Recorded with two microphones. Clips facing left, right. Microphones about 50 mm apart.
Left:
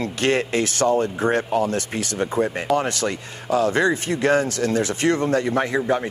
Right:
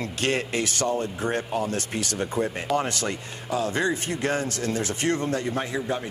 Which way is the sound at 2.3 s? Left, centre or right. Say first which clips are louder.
Left 6 dB; left.